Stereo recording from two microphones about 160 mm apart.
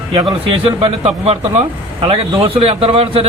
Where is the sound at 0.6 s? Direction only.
35° right (ahead or behind).